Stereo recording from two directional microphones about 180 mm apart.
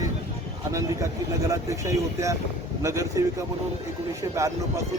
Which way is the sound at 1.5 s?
15° right (ahead or behind).